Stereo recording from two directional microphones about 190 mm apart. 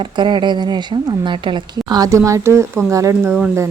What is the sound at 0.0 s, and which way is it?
A woman's voice, 25° right (ahead or behind).